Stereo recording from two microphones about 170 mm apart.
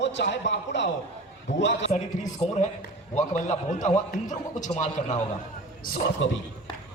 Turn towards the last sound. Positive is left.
turn(degrees=90)